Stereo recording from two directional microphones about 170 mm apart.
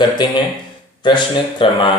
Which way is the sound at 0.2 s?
30° left (ahead or behind).